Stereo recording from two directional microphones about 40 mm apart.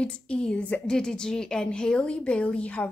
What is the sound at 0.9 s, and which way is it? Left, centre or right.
A woman's voice, centre.